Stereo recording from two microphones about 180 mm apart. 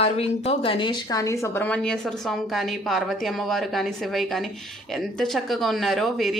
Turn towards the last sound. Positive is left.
turn(degrees=0)  # may be behind; listen again after turning